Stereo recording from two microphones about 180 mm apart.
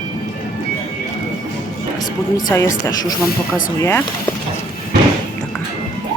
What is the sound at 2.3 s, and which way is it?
Speech, 15° left (ahead or behind).